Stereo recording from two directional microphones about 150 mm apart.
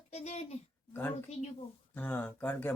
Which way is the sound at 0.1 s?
45° left (ahead or behind).